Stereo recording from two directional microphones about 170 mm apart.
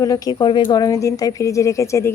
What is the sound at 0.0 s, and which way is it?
A woman's voice, 20° left (ahead or behind).